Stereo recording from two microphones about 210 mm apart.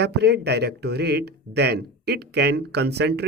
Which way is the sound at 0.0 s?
50° right (ahead or behind).